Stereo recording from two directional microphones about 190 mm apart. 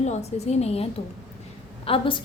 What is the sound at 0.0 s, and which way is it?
A woman's voice, 35° left (ahead or behind).